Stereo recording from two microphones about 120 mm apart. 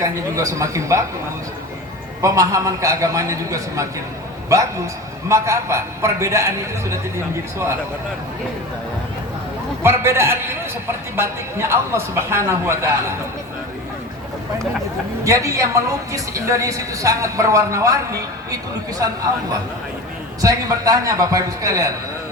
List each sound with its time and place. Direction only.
0.0 s a woman's voice: 25° right (ahead or behind)
2.2 s a woman's voice: 25° right (ahead or behind)
9.8 s a woman's voice: 20° right (ahead or behind)
15.2 s a woman's voice: 25° right (ahead or behind)
20.4 s a woman's voice: 30° right (ahead or behind)